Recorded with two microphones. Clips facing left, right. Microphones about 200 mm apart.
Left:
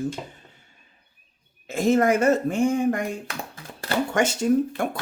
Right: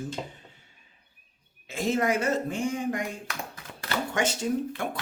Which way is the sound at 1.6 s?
45° left (ahead or behind).